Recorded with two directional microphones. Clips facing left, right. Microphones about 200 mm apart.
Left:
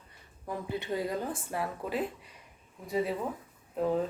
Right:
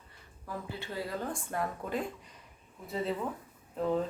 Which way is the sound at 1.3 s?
5° left (ahead or behind).